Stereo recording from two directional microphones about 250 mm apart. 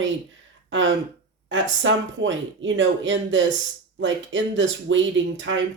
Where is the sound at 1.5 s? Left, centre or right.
Right.